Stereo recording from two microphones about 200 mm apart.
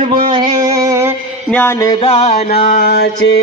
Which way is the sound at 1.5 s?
10° left (ahead or behind).